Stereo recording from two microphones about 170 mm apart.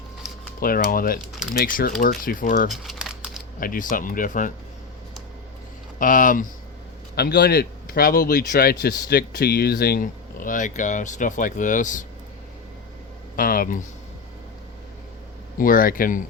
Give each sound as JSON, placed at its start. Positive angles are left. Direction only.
{"t": 0.6, "sound": "speech", "side_deg": 60}
{"t": 2.6, "sound": "a sound", "side_deg": 0}
{"t": 3.6, "sound": "speech", "side_deg": 55}
{"t": 6.0, "sound": "speech", "side_deg": 50}
{"t": 7.2, "sound": "speech", "side_deg": 70}
{"t": 13.3, "sound": "speech", "side_deg": 55}
{"t": 15.5, "sound": "speech", "side_deg": 55}